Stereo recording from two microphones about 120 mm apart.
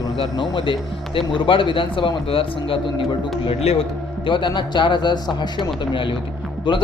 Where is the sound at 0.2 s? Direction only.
45° left (ahead or behind).